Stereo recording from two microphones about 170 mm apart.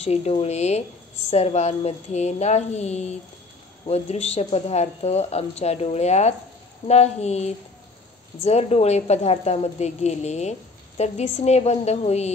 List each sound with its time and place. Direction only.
0.0 s speech: 40° left (ahead or behind)